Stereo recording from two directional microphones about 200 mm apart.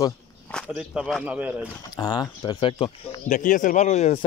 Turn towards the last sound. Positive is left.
turn(degrees=35)  # may be behind; listen again after turning